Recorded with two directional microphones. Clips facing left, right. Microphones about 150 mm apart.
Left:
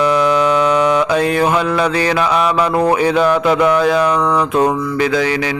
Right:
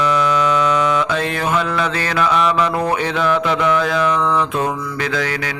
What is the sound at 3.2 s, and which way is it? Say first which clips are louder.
Music: left 5 dB; 40° left (ahead or behind).